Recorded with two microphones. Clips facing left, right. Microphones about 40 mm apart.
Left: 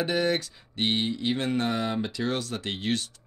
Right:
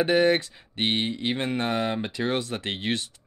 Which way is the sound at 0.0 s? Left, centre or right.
Right.